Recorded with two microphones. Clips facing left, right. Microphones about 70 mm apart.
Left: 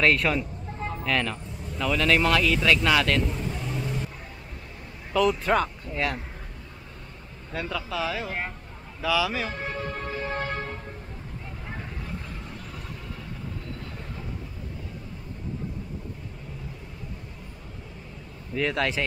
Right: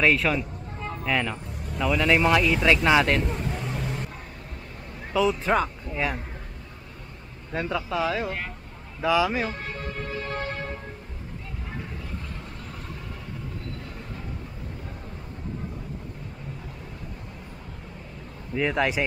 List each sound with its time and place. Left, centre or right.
0.0 s speech: centre
1.0 s speech: centre
3.3 s vehicle: right
5.1 s speech: centre
7.5 s speech: right
9.7 s music: left
18.5 s speech: centre